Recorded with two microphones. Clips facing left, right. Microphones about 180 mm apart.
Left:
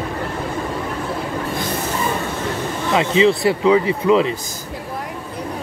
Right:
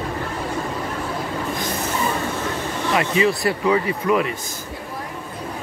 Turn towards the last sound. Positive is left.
turn(degrees=25)  # may be behind; listen again after turning